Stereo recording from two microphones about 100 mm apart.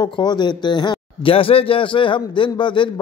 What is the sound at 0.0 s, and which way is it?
Speech, 45° left (ahead or behind).